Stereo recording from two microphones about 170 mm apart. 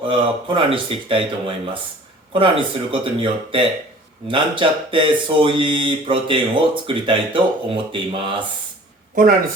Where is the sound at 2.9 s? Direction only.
30° right (ahead or behind).